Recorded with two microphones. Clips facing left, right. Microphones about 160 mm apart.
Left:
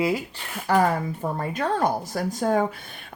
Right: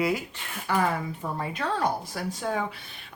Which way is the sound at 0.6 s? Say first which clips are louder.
Left 5 dB; 40° left (ahead or behind).